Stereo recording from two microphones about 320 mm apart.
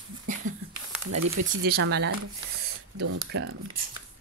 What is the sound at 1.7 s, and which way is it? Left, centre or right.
Speech, right.